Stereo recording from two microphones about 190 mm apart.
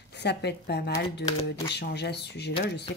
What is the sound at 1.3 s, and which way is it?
Speech, 25° left (ahead or behind).